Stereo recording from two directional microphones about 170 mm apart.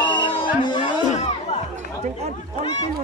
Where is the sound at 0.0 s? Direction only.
25° left (ahead or behind).